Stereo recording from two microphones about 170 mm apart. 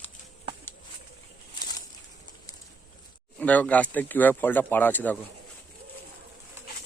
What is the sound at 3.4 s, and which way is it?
Speech, 10° left (ahead or behind).